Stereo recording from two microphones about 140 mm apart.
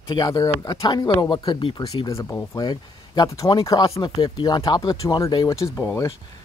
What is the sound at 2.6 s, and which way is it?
Speech, 30° left (ahead or behind).